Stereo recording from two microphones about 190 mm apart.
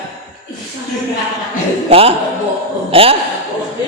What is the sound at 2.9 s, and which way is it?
Speech, 30° right (ahead or behind).